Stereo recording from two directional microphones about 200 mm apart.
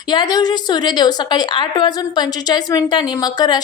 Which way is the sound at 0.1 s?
20° left (ahead or behind).